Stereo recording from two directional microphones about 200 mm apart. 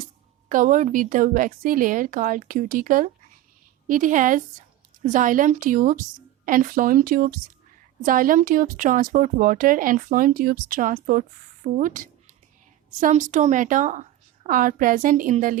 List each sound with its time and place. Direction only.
0.4 s a woman's voice: 40° right (ahead or behind)